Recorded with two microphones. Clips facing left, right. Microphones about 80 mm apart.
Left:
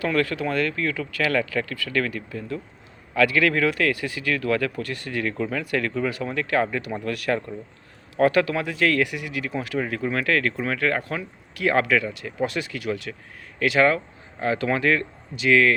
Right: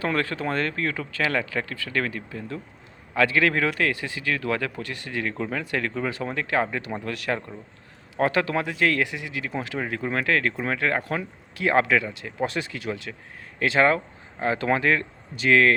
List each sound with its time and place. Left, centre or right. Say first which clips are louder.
0.0 s speech: left 2 dB; right